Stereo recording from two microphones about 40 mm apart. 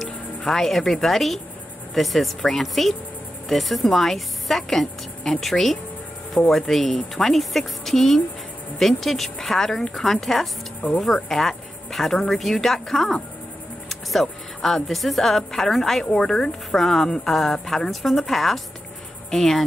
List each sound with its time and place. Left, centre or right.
0.5 s a woman's voice: centre